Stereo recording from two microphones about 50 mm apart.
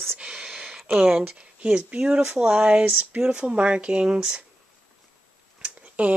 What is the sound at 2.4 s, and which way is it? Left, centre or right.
Speech, right.